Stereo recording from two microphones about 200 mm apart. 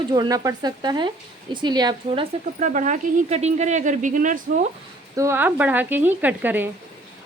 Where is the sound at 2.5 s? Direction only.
40° right (ahead or behind).